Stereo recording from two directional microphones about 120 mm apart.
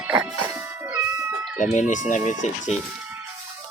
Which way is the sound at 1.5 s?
90° left.